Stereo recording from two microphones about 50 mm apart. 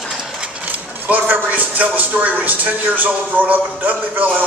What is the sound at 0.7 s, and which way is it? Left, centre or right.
Speech, right.